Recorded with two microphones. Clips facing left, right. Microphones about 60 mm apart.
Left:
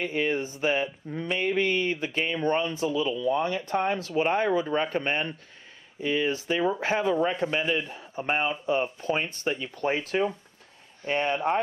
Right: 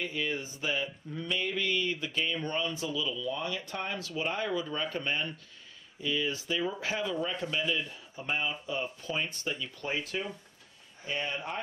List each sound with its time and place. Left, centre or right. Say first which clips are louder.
0.0 s speech: left 7 dB; left